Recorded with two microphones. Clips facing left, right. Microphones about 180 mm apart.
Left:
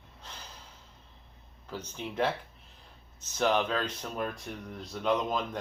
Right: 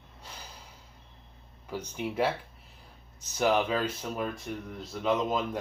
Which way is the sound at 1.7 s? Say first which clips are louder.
Right 4 dB; 10° right (ahead or behind).